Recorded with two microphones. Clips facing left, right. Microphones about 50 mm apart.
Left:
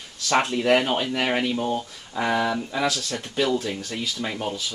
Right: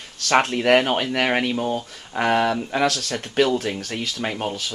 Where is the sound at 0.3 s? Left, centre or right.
Right.